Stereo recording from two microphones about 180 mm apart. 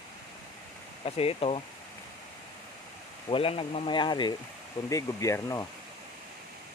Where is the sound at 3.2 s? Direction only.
30° left (ahead or behind).